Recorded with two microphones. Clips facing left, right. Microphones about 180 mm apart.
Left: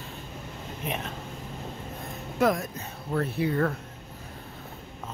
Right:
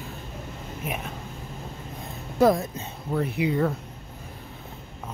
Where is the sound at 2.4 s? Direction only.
30° right (ahead or behind).